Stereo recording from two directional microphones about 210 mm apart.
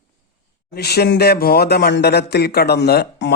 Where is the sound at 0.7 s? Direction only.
50° left (ahead or behind).